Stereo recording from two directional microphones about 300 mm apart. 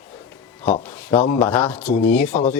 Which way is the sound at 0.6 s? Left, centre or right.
Centre.